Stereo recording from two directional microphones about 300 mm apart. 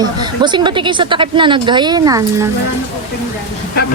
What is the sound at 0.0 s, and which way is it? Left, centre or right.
A woman's voice, centre.